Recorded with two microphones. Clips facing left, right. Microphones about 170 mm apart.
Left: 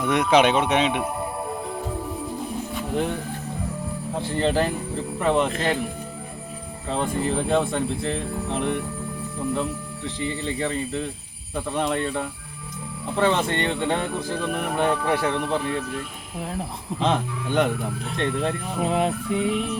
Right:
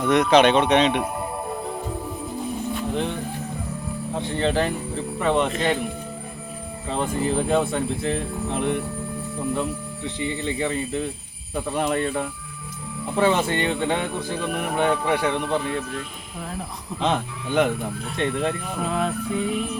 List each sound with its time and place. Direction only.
0.0 s speech: 10° left (ahead or behind)
2.9 s speech: 5° left (ahead or behind)
6.8 s speech: centre (ahead or behind)
17.0 s speech: centre (ahead or behind)
18.8 s music: 20° left (ahead or behind)